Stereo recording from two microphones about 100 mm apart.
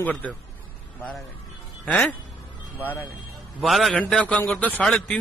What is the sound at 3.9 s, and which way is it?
A man's voice, 10° left (ahead or behind).